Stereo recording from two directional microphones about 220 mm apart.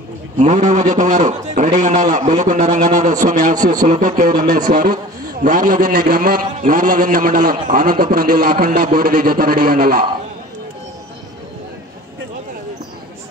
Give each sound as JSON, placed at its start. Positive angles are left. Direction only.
{"t": 0.4, "sound": "a man's voice", "side_deg": -35}